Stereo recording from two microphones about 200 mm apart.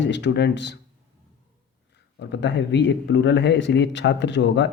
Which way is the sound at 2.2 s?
60° left (ahead or behind).